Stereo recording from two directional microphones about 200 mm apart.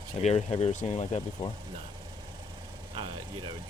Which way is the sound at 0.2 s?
35° left (ahead or behind).